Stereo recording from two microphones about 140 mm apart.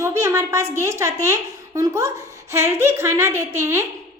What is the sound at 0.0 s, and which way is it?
A woman's voice, 20° right (ahead or behind).